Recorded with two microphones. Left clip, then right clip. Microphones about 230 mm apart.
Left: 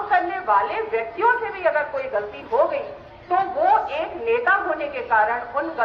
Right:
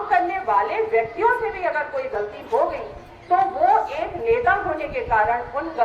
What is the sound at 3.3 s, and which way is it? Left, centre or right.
A woman's voice, right.